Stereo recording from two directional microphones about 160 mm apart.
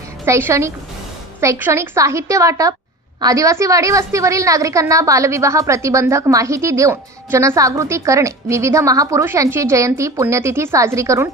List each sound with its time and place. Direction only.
0.2 s a woman's voice: 15° right (ahead or behind)